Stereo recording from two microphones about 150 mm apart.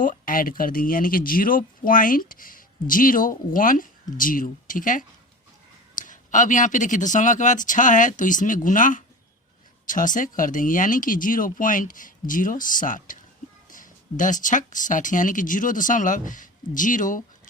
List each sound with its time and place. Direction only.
0.0 s speech: 65° left (ahead or behind)